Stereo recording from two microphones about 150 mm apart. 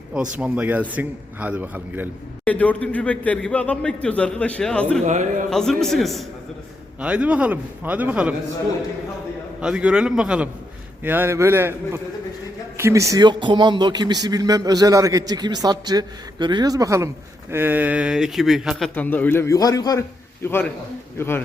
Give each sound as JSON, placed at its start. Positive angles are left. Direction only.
{"t": 0.1, "sound": "a man's voice", "side_deg": -5}
{"t": 2.4, "sound": "a man's voice", "side_deg": 10}
{"t": 5.0, "sound": "a man's voice", "side_deg": -55}
{"t": 5.5, "sound": "a man's voice", "side_deg": 5}
{"t": 9.6, "sound": "a man's voice", "side_deg": -5}
{"t": 18.9, "sound": "a man's voice", "side_deg": 10}